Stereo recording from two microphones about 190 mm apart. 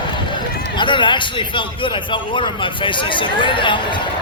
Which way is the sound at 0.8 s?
25° left (ahead or behind).